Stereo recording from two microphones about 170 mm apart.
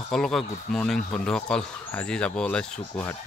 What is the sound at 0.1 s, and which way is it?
Speech, centre (ahead or behind).